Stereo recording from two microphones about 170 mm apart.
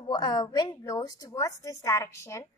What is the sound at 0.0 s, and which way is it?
A woman's voice, 25° left (ahead or behind).